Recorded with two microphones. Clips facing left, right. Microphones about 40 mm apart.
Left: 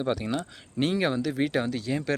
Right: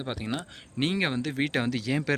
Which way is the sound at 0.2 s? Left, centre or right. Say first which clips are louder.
Left 2 dB; centre.